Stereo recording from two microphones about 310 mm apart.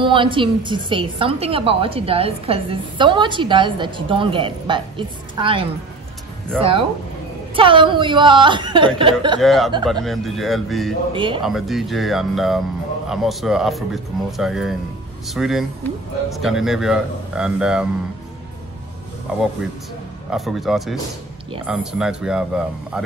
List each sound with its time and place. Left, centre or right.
0.0 s a woman's voice: centre
9.4 s speech: centre
11.1 s a woman's voice: centre
11.4 s speech: centre
19.3 s speech: centre